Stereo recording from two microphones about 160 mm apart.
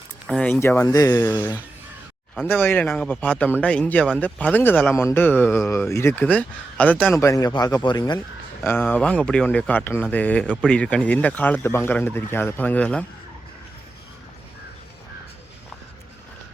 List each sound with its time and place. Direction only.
0.3 s speech: 5° left (ahead or behind)
0.5 s speech: 15° left (ahead or behind)
2.5 s a man's voice: 10° left (ahead or behind)
8.6 s a man's voice: 10° left (ahead or behind)